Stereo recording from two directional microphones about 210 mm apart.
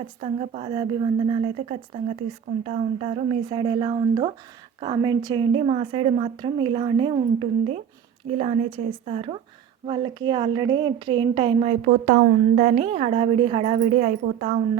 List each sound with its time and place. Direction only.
0.2 s a woman's voice: 30° right (ahead or behind)
3.5 s a woman's voice: 20° right (ahead or behind)
8.4 s a woman's voice: 25° right (ahead or behind)
11.9 s a woman's voice: 45° right (ahead or behind)